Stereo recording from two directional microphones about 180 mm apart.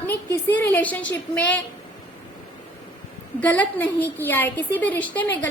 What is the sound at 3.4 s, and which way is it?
A woman's voice, 10° left (ahead or behind).